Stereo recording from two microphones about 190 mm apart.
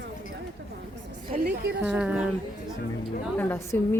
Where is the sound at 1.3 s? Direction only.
50° right (ahead or behind).